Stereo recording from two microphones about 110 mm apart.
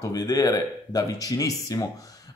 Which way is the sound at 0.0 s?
35° left (ahead or behind).